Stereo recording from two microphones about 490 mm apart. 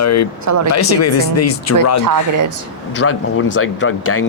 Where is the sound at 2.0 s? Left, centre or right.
Right.